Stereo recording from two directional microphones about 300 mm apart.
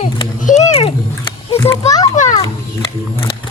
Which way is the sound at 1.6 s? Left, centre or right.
Centre.